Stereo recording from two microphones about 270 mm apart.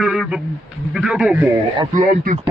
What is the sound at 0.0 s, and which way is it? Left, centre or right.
A man's voice, centre.